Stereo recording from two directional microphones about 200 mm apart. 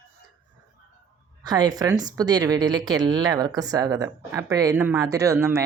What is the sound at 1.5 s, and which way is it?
A woman's voice, 20° right (ahead or behind).